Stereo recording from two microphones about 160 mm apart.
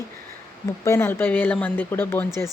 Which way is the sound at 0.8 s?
15° left (ahead or behind).